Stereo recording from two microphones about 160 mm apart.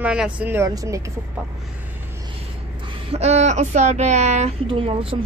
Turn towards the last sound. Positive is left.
turn(degrees=-35)  # may be behind; listen again after turning